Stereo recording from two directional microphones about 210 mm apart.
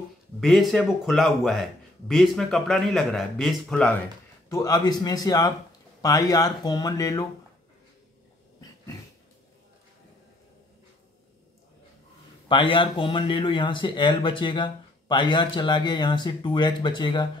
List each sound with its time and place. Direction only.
0.4 s speech: centre (ahead or behind)
4.5 s speech: 15° left (ahead or behind)
12.4 s speech: 25° left (ahead or behind)